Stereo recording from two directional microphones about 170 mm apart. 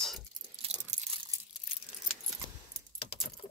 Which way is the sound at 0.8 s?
40° right (ahead or behind).